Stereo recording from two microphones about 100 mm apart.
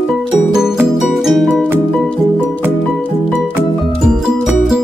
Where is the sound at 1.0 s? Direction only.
Centre (ahead or behind).